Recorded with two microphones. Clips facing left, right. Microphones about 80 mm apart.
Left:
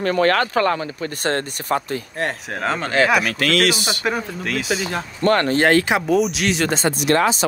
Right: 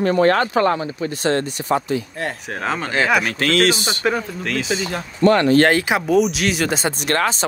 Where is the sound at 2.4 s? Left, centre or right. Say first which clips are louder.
Even; centre.